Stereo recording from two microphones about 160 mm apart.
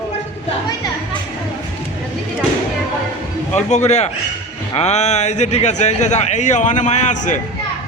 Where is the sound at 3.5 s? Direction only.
45° left (ahead or behind).